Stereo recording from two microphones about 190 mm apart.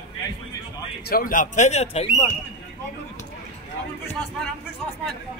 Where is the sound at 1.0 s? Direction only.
50° left (ahead or behind).